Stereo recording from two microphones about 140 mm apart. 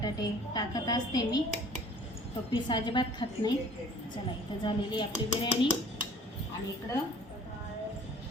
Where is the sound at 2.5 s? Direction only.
35° left (ahead or behind).